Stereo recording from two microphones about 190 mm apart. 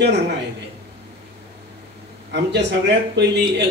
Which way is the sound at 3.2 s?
60° right (ahead or behind).